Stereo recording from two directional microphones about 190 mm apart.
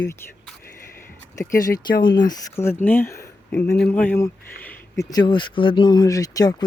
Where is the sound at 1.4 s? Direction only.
20° left (ahead or behind).